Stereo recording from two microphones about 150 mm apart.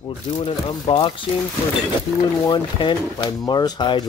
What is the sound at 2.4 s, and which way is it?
Speech, 30° left (ahead or behind).